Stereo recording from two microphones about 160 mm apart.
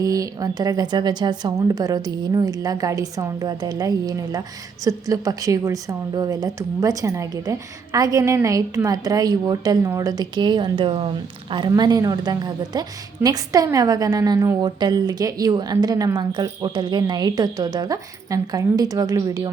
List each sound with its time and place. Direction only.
0.0 s a woman's voice: 20° right (ahead or behind)